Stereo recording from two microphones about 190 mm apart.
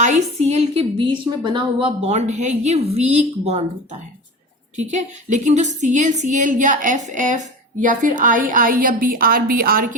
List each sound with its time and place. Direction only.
0.0 s a woman's voice: 35° right (ahead or behind)
4.8 s a woman's voice: 40° right (ahead or behind)